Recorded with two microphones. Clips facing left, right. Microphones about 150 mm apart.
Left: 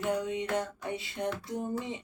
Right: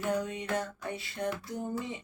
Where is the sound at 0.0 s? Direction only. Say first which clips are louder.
Left 1 dB; 20° left (ahead or behind).